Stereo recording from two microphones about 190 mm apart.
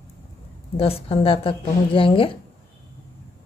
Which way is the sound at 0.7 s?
30° left (ahead or behind).